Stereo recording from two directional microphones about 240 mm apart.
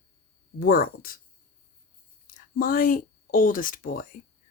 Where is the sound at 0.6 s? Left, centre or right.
Left.